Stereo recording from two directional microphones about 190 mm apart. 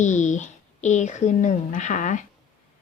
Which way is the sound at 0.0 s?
40° left (ahead or behind).